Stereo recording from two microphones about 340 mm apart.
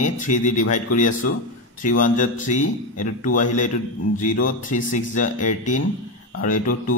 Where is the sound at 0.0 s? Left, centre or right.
Left.